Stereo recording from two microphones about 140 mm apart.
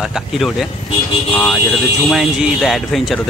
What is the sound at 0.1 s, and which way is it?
Speech, centre (ahead or behind).